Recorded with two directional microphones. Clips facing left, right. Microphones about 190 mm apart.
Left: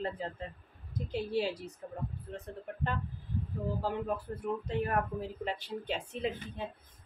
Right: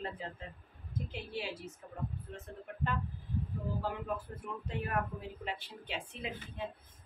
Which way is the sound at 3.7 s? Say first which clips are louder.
Left 3 dB; 35° left (ahead or behind).